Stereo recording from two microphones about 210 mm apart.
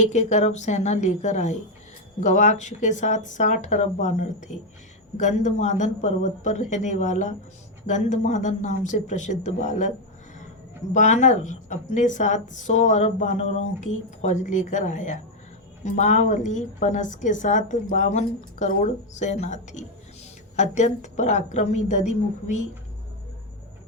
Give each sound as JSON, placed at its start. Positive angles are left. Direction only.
{"t": 0.0, "sound": "a woman's voice", "side_deg": 35}
{"t": 10.9, "sound": "a woman's voice", "side_deg": 35}